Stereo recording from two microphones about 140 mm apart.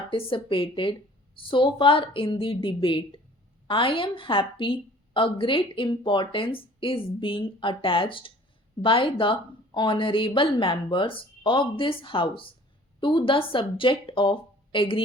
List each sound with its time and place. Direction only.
0.1 s a woman's voice: 40° left (ahead or behind)